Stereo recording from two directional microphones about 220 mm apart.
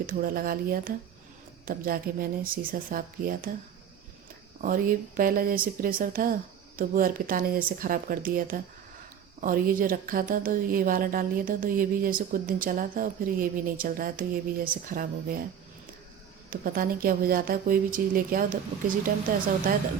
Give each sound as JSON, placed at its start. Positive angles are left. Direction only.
{"t": 0.0, "sound": "speech", "side_deg": -40}
{"t": 4.6, "sound": "speech", "side_deg": -40}
{"t": 16.5, "sound": "speech", "side_deg": -40}